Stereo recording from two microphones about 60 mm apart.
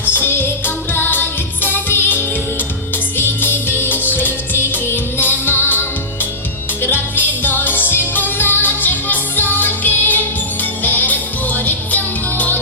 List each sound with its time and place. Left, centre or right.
0.1 s music: left
6.9 s music: left